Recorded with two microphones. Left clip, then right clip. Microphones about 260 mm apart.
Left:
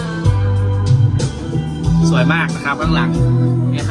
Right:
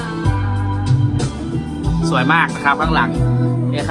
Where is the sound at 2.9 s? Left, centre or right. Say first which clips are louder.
Right 2 dB; centre.